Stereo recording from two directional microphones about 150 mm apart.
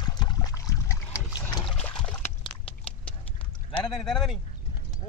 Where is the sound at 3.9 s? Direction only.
Centre (ahead or behind).